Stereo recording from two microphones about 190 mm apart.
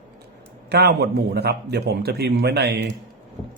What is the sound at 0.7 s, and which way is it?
A man's voice, 60° right (ahead or behind).